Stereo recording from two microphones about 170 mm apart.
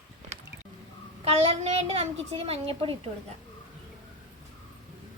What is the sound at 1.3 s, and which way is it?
A child's voice, 35° right (ahead or behind).